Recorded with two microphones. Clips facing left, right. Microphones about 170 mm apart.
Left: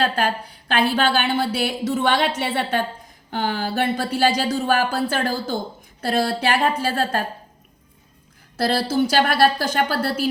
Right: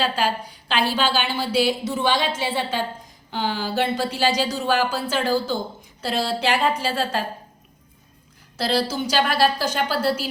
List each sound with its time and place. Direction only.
0.0 s a woman's voice: 55° left (ahead or behind)
8.5 s speech: 50° left (ahead or behind)